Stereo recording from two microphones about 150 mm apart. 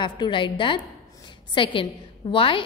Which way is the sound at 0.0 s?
35° left (ahead or behind).